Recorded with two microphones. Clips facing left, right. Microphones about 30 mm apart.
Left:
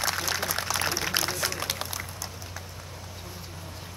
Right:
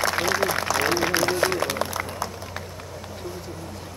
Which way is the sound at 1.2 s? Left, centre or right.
Right.